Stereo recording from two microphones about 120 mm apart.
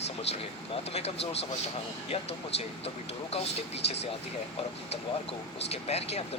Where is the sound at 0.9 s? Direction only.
60° left (ahead or behind).